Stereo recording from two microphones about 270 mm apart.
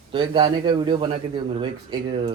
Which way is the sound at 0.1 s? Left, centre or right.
Centre.